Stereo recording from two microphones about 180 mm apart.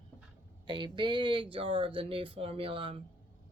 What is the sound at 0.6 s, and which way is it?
Speech, 25° right (ahead or behind).